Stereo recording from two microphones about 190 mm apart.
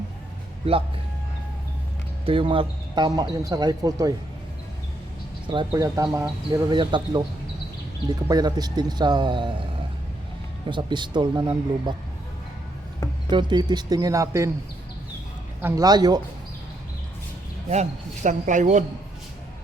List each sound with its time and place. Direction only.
0.6 s speech: 30° right (ahead or behind)
2.2 s speech: 30° right (ahead or behind)
5.5 s speech: 20° right (ahead or behind)
10.7 s speech: 25° right (ahead or behind)
13.3 s speech: 20° right (ahead or behind)
15.6 s speech: 20° right (ahead or behind)
17.7 s speech: 40° right (ahead or behind)